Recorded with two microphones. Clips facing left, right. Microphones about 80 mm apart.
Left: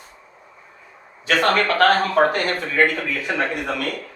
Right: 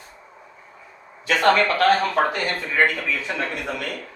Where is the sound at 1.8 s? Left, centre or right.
Left.